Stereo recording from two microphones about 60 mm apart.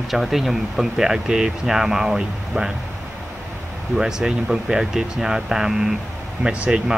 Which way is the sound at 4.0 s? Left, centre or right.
Centre.